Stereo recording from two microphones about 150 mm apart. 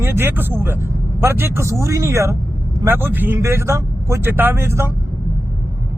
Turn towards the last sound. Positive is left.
turn(degrees=-15)  # may be behind; listen again after turning